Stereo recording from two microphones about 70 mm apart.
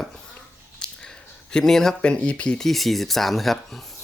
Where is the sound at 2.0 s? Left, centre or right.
Centre.